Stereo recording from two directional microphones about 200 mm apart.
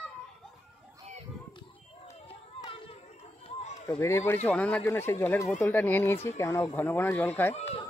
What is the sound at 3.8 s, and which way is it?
Speech, 15° left (ahead or behind).